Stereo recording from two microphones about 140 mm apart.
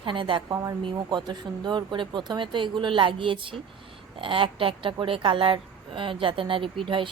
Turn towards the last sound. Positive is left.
turn(degrees=-35)  # may be behind; listen again after turning